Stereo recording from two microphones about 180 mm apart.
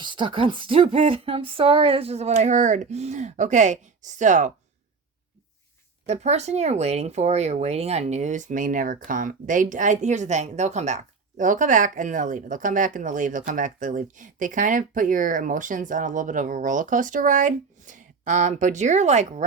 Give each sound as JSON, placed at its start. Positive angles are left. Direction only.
{"t": 0.0, "sound": "speech", "side_deg": -25}
{"t": 6.1, "sound": "speech", "side_deg": -40}